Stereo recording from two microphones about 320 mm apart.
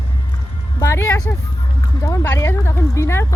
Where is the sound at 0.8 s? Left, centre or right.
Centre.